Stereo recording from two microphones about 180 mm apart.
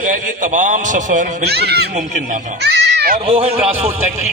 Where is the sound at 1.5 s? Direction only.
65° right (ahead or behind).